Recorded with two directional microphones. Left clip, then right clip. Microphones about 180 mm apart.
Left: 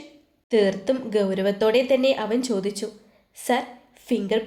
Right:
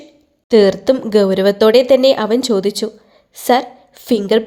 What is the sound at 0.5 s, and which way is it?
A woman's voice, 45° right (ahead or behind).